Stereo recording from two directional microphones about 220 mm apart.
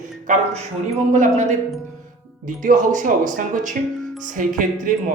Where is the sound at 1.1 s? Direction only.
35° right (ahead or behind).